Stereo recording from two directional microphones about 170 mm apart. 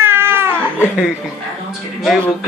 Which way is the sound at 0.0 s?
15° right (ahead or behind).